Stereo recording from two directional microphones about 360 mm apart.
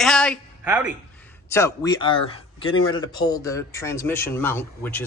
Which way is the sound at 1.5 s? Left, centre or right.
Centre.